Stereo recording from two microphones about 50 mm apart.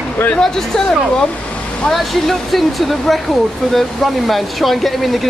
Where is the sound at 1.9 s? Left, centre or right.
Centre.